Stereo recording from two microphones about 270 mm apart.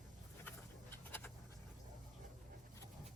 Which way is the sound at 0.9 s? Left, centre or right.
Centre.